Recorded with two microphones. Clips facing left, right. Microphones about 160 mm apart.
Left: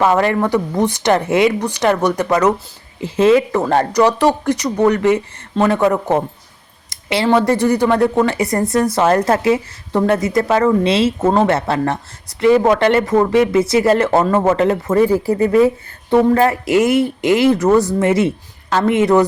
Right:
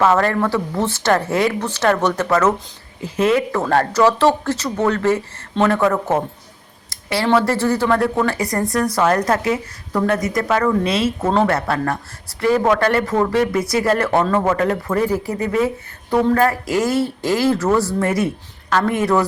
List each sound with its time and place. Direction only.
0.0 s a woman's voice: 15° left (ahead or behind)
3.0 s a woman's voice: 25° left (ahead or behind)
6.9 s a sound: 20° left (ahead or behind)
7.3 s speech: 15° left (ahead or behind)